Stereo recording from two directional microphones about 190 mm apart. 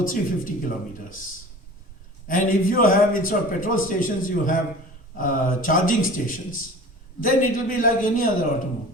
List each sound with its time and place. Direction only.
0.0 s a man's voice: 45° left (ahead or behind)
2.2 s a man's voice: 45° left (ahead or behind)